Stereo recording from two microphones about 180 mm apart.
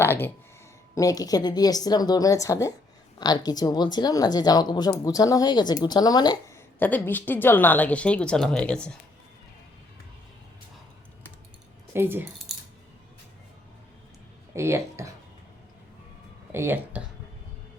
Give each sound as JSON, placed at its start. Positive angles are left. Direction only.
{"t": 0.0, "sound": "a sound", "side_deg": 10}
{"t": 0.9, "sound": "speech", "side_deg": 20}
{"t": 6.7, "sound": "a woman's voice", "side_deg": 10}
{"t": 11.9, "sound": "speech", "side_deg": -10}
{"t": 12.5, "sound": "coin", "side_deg": 0}
{"t": 14.5, "sound": "speech", "side_deg": -15}
{"t": 16.5, "sound": "speech", "side_deg": -10}